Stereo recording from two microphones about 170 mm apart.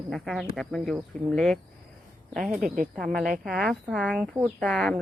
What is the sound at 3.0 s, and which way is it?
Speech, centre (ahead or behind).